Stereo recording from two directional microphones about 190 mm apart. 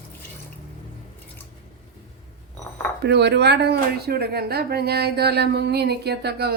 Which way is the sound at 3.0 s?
60° right (ahead or behind).